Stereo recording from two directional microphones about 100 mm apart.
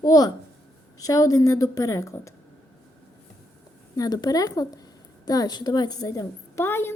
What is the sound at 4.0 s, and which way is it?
Speech, 40° left (ahead or behind).